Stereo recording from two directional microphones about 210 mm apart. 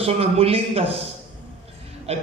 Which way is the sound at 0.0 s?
30° right (ahead or behind).